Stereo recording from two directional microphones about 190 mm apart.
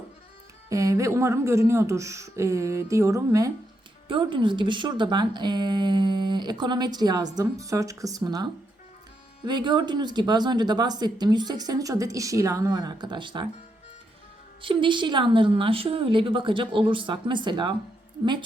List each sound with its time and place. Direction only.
0.7 s speech: 15° right (ahead or behind)
9.5 s speech: 25° right (ahead or behind)
14.6 s speech: 25° right (ahead or behind)